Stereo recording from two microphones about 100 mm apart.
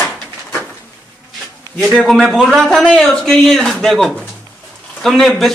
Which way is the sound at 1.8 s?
Centre (ahead or behind).